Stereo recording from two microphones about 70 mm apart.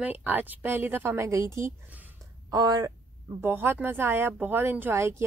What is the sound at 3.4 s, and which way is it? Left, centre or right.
A woman's voice, right.